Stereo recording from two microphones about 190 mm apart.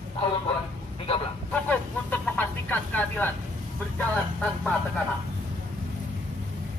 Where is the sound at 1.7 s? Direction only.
10° left (ahead or behind).